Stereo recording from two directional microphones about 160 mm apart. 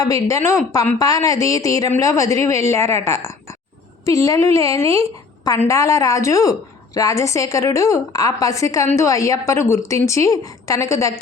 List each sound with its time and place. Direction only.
0.0 s a woman's voice: 20° left (ahead or behind)